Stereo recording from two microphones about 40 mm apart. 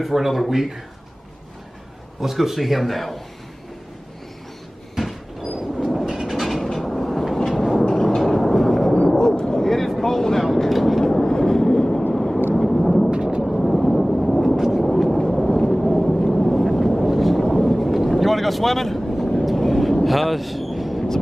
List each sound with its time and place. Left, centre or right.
0.0 s a man's voice: centre
2.1 s a man's voice: centre
4.9 s a sound: centre
5.8 s vehicle: centre
9.0 s a sound: centre
10.7 s vehicle: centre
11.1 s vehicle: centre
12.5 s thunder: centre
13.1 s thunder: right
13.4 s a sound: centre
15.1 s vehicle: centre
20.1 s a sound: centre